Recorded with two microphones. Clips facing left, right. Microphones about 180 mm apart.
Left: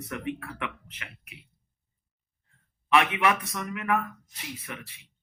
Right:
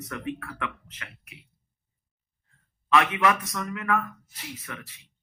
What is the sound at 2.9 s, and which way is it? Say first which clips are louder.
Speech: right 1 dB; 20° left (ahead or behind).